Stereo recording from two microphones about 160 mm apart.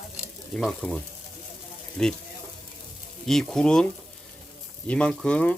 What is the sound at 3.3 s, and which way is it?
Speech, centre (ahead or behind).